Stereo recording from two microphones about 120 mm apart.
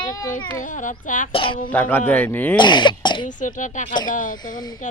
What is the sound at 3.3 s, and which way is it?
Speech, 90° left.